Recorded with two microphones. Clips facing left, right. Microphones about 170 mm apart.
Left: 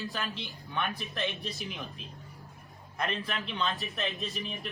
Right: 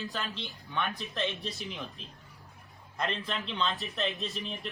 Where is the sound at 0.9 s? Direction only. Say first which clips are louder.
Right 1 dB; centre (ahead or behind).